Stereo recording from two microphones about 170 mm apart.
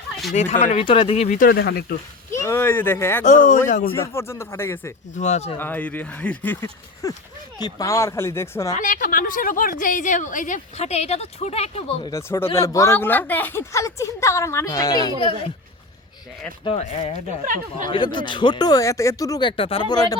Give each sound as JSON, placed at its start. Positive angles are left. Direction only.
{"t": 0.3, "sound": "speech", "side_deg": 45}
{"t": 1.4, "sound": "speech", "side_deg": 60}
{"t": 2.3, "sound": "speech", "side_deg": 15}
{"t": 3.7, "sound": "a woman's voice", "side_deg": 50}
{"t": 4.0, "sound": "speech", "side_deg": 15}
{"t": 5.1, "sound": "a woman's voice", "side_deg": 45}
{"t": 5.5, "sound": "speech", "side_deg": 10}
{"t": 8.7, "sound": "a woman's voice", "side_deg": 50}
{"t": 12.0, "sound": "speech", "side_deg": 15}
{"t": 16.6, "sound": "speech", "side_deg": 40}
{"t": 17.4, "sound": "speech", "side_deg": -50}
{"t": 17.9, "sound": "speech", "side_deg": 30}